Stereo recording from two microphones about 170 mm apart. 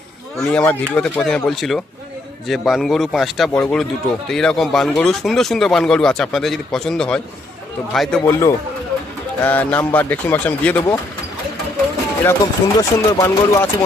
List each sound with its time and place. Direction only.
0.3 s speech: 5° left (ahead or behind)
8.2 s a man's voice: 15° left (ahead or behind)
12.2 s a man's voice: 15° left (ahead or behind)